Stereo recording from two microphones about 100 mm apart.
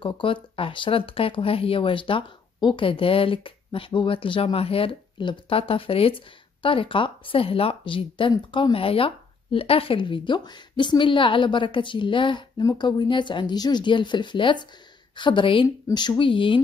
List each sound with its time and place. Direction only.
0.0 s speech: 60° left (ahead or behind)
8.7 s speech: 70° left (ahead or behind)